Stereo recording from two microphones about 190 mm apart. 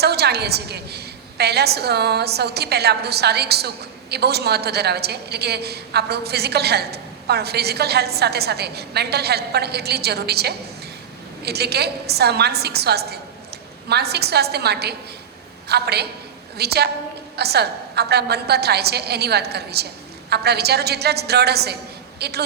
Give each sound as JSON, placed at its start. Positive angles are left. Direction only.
{"t": 0.0, "sound": "a woman's voice", "side_deg": -60}